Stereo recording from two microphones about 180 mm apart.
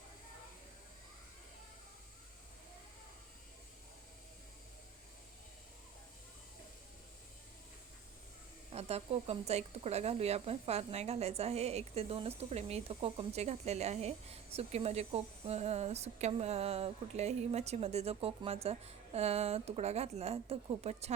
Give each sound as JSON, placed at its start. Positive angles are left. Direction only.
{"t": 8.7, "sound": "speech", "side_deg": -35}